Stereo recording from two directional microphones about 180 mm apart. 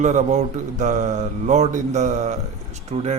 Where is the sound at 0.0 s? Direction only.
40° right (ahead or behind).